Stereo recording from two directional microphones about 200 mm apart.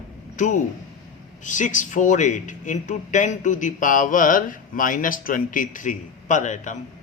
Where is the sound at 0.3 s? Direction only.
40° left (ahead or behind).